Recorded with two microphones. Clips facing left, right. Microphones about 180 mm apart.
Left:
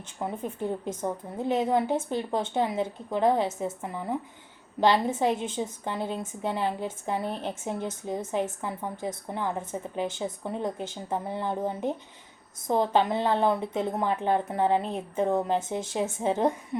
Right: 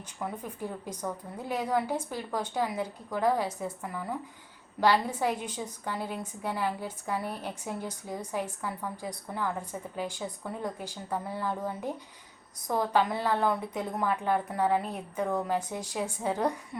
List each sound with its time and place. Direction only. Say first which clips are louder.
0.2 s a woman's voice: left 4 dB; 25° left (ahead or behind)